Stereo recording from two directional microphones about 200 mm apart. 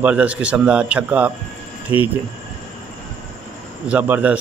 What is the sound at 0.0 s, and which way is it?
A man's voice, 5° right (ahead or behind).